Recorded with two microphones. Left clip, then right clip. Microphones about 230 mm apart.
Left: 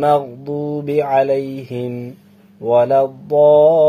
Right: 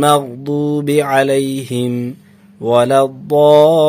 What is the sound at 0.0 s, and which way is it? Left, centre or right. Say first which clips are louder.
Mantra: right 2 dB; right.